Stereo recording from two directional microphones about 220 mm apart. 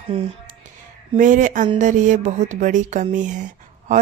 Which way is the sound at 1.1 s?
35° right (ahead or behind).